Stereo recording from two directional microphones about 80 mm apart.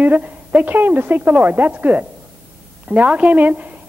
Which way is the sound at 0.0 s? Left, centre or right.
Right.